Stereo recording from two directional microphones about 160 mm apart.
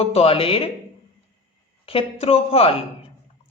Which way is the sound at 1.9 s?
35° left (ahead or behind).